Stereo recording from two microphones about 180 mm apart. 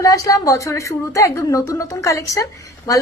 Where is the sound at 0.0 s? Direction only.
15° left (ahead or behind).